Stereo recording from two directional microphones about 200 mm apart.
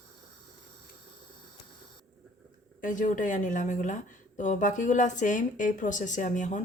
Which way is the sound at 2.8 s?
40° left (ahead or behind).